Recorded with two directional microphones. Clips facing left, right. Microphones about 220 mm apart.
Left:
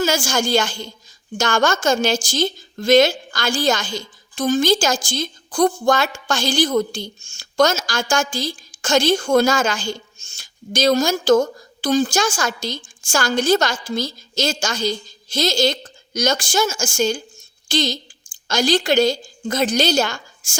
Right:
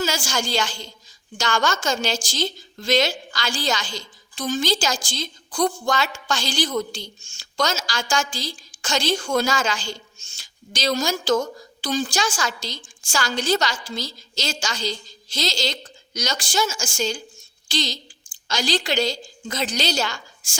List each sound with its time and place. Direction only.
0.0 s a woman's voice: 50° left (ahead or behind)